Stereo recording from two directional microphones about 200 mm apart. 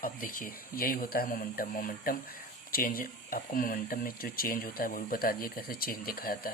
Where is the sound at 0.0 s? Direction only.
45° left (ahead or behind).